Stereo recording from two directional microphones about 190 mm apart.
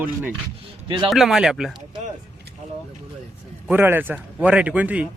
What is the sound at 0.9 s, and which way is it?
Speech, 25° right (ahead or behind).